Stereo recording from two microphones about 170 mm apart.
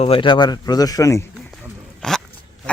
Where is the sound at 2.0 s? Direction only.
5° left (ahead or behind).